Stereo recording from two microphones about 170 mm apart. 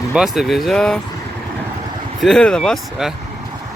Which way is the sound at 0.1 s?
5° right (ahead or behind).